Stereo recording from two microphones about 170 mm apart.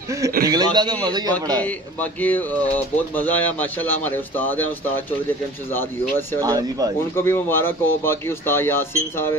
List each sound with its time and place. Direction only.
0.5 s a man's voice: 25° right (ahead or behind)
1.6 s speech: 10° left (ahead or behind)
6.4 s a man's voice: 20° right (ahead or behind)
7.2 s speech: 15° left (ahead or behind)